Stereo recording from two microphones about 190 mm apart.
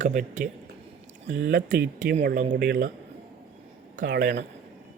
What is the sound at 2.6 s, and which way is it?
Speech, 50° right (ahead or behind).